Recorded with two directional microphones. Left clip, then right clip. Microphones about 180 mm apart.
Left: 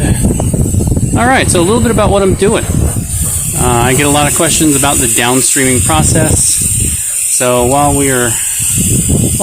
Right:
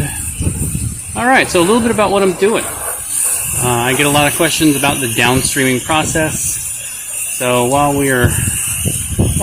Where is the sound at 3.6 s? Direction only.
25° left (ahead or behind).